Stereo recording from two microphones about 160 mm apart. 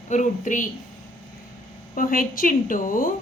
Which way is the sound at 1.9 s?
60° left (ahead or behind).